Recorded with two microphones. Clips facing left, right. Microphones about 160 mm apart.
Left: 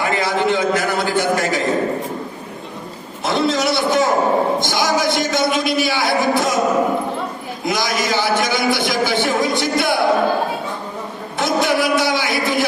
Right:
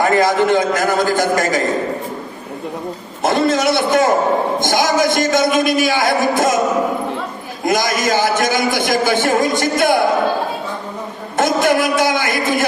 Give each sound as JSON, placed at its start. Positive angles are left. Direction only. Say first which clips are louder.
{"t": 0.0, "sound": "a man's voice", "louder": "right 5 dB", "side_deg": -45}
{"t": 3.2, "sound": "a man's voice", "louder": "right 3 dB", "side_deg": -50}
{"t": 7.6, "sound": "a man's voice", "louder": "right 4 dB", "side_deg": -50}
{"t": 11.3, "sound": "a man's voice", "louder": "right 3 dB", "side_deg": -50}